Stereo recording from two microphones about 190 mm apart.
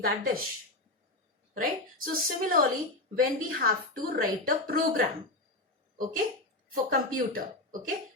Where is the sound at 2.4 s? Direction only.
50° right (ahead or behind).